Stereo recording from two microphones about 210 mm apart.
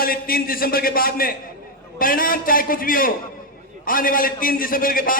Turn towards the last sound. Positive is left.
turn(degrees=40)  # may be behind; listen again after turning